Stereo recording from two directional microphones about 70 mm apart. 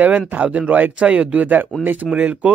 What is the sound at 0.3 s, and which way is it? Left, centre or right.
Speech, right.